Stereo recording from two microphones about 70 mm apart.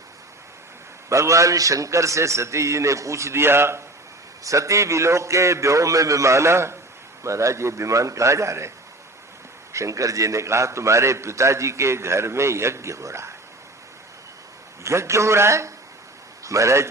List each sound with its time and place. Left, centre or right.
1.1 s a man's voice: right
4.4 s a man's voice: right
9.7 s a man's voice: right
14.8 s a man's voice: right